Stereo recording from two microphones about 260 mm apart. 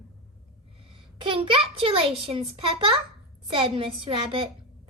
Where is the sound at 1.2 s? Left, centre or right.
Centre.